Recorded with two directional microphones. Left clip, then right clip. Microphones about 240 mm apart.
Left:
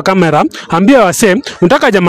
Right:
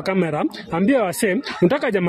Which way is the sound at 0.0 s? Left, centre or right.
Left.